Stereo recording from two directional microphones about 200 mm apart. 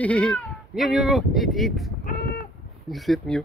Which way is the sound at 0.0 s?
5° left (ahead or behind).